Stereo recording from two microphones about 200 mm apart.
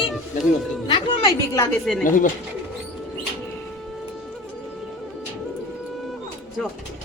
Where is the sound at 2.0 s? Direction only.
40° left (ahead or behind).